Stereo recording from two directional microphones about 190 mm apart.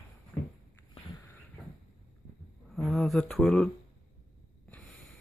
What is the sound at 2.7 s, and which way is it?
Speech, centre (ahead or behind).